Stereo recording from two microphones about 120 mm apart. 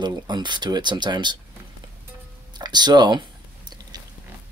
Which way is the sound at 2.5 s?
35° right (ahead or behind).